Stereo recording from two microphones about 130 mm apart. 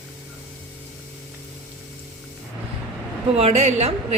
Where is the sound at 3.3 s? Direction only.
50° right (ahead or behind).